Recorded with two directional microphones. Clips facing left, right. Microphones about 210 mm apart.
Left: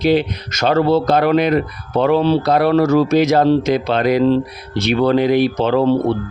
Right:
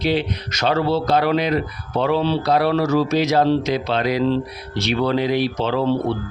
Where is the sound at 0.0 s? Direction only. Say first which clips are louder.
Left 5 dB; 45° left (ahead or behind).